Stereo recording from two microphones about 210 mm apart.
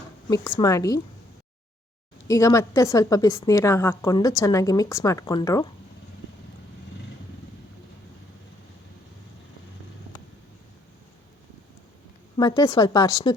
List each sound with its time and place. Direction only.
0.3 s a woman's voice: 20° left (ahead or behind)
2.2 s a woman's voice: 15° left (ahead or behind)
12.4 s a woman's voice: 15° left (ahead or behind)